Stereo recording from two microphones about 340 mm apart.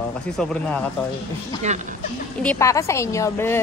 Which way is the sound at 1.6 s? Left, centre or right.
Right.